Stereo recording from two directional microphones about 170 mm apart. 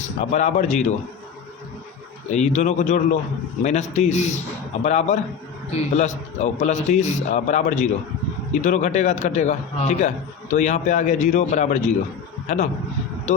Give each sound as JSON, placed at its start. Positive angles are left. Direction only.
{"t": 0.2, "sound": "a man's voice", "side_deg": 40}
{"t": 2.3, "sound": "a man's voice", "side_deg": 45}
{"t": 13.3, "sound": "speech", "side_deg": 45}